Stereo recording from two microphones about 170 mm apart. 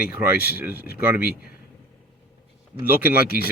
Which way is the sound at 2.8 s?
10° right (ahead or behind).